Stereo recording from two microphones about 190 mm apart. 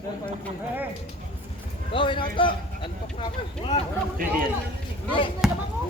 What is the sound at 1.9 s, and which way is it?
Speech, 25° left (ahead or behind).